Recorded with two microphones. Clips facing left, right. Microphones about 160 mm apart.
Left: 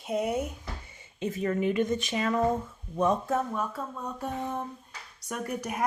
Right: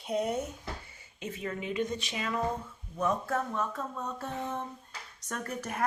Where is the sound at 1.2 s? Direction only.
40° left (ahead or behind).